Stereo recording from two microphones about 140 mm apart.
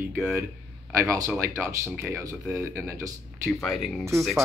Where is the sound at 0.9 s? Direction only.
20° right (ahead or behind).